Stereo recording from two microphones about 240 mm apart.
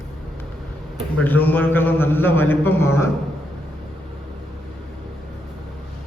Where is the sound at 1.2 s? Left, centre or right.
Centre.